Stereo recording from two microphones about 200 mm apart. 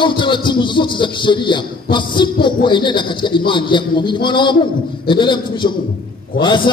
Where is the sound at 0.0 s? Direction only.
25° left (ahead or behind).